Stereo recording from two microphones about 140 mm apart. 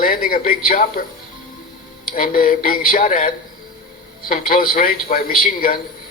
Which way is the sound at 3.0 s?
60° left (ahead or behind).